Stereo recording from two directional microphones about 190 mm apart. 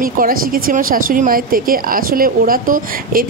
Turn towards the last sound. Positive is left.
turn(degrees=-45)  # may be behind; listen again after turning